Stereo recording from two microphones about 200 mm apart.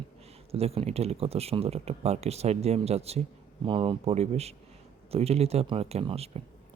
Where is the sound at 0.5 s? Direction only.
30° right (ahead or behind).